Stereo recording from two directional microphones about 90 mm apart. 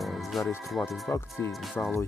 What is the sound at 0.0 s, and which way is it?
Music, centre (ahead or behind).